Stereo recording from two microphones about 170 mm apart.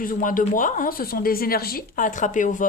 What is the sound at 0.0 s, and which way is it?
A woman's voice, 50° left (ahead or behind).